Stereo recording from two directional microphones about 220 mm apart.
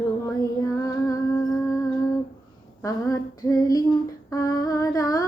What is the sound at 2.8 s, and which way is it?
Female singing, 15° left (ahead or behind).